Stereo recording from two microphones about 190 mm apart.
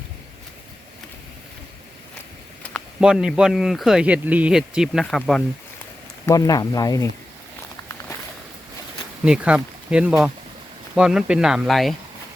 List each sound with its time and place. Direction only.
3.0 s speech: 5° right (ahead or behind)
6.2 s speech: 20° left (ahead or behind)
9.2 s speech: 5° right (ahead or behind)